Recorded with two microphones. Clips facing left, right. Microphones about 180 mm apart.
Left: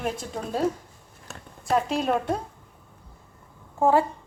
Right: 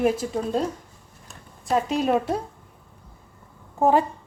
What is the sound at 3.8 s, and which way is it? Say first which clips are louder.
Speech: right 1 dB; 20° right (ahead or behind).